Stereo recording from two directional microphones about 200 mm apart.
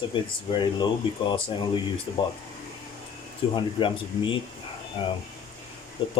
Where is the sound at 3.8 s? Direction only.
25° left (ahead or behind).